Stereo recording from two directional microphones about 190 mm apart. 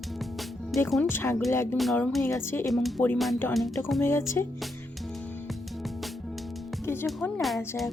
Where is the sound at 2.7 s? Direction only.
Centre (ahead or behind).